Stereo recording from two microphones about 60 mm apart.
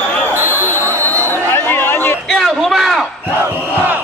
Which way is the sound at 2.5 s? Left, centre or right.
Centre.